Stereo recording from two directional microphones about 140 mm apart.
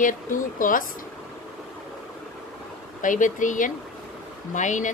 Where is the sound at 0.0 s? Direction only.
70° left (ahead or behind).